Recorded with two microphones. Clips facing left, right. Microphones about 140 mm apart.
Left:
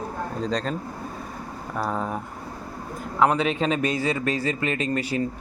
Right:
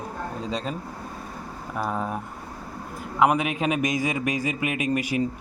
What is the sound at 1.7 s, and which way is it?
Speech, 5° right (ahead or behind).